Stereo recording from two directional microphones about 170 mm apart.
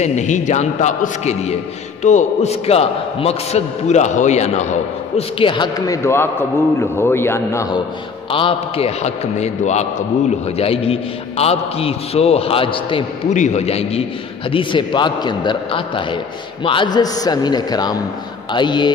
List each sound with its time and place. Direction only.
0.0 s a man's voice: 45° left (ahead or behind)
5.4 s a man's voice: 25° left (ahead or behind)
8.3 s a man's voice: 30° left (ahead or behind)
13.3 s a man's voice: 45° left (ahead or behind); by 18.9 s 25° left (ahead or behind)